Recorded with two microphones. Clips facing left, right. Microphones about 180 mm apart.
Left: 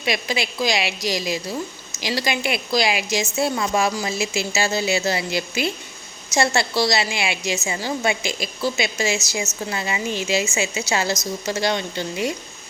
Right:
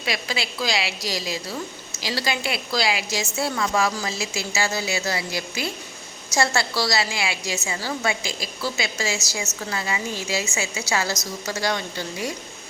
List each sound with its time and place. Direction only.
0.0 s a woman's voice: 20° left (ahead or behind)